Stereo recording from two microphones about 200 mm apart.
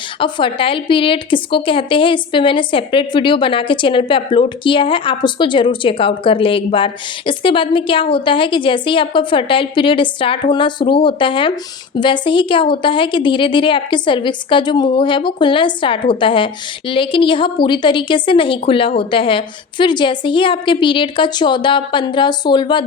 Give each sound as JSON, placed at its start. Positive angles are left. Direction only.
{"t": 0.2, "sound": "a woman's voice", "side_deg": 25}